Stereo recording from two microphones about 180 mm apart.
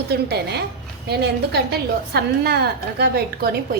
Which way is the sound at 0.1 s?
65° right (ahead or behind).